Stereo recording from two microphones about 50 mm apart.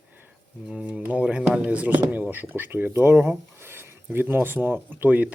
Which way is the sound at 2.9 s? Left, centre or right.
Right.